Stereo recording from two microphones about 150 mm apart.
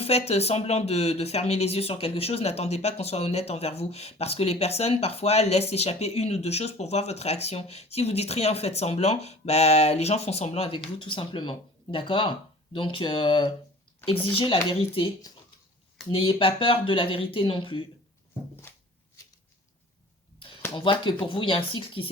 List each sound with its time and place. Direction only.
0.0 s speech: 45° left (ahead or behind)
20.7 s speech: 35° left (ahead or behind)